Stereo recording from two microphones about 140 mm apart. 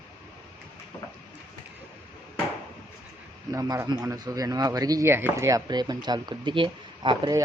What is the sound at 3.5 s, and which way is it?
Speech, 25° right (ahead or behind).